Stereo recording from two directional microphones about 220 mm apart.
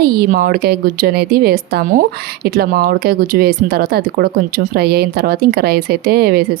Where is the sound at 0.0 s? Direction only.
45° right (ahead or behind).